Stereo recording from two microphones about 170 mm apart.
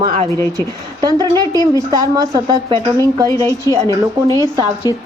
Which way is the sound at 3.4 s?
15° left (ahead or behind).